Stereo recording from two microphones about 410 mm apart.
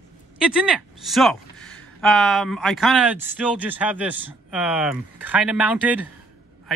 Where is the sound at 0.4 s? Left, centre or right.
Centre.